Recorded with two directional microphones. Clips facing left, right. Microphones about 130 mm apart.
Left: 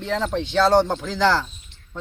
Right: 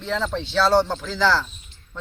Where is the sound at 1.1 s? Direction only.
50° left (ahead or behind).